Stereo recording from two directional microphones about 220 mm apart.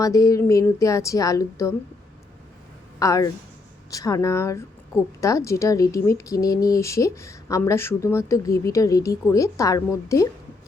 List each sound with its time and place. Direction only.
0.0 s speech: 15° left (ahead or behind)
3.0 s speech: 15° left (ahead or behind)